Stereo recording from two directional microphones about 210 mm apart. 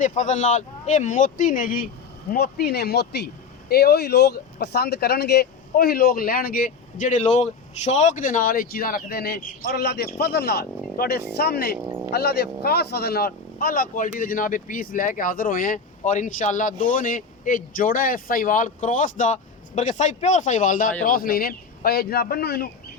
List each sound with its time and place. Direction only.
0.0 s speech: 35° left (ahead or behind)
11.9 s a sound: 10° right (ahead or behind)
12.1 s speech: 50° left (ahead or behind)